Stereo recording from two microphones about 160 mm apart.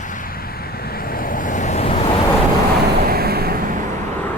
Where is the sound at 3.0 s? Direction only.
75° right (ahead or behind).